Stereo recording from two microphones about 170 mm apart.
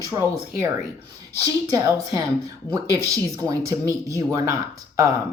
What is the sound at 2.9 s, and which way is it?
Speech, 20° right (ahead or behind).